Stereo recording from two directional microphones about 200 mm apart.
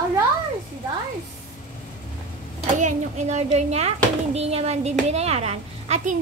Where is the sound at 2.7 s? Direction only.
35° right (ahead or behind).